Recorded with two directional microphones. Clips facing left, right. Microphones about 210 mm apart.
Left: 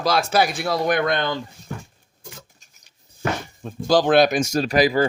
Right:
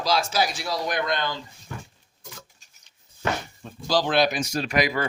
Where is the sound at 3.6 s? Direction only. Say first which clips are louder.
Left 7 dB; 50° left (ahead or behind); by 5.1 s 35° left (ahead or behind).